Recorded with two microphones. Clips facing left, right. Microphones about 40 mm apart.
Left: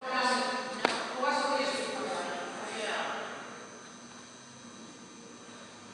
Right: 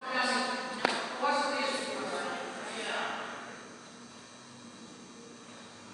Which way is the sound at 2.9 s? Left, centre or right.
Centre.